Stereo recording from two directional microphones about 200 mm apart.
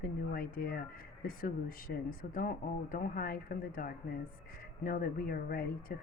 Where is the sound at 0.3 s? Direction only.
45° left (ahead or behind).